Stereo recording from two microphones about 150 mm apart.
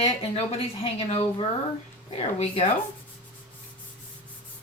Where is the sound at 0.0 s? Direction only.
40° left (ahead or behind).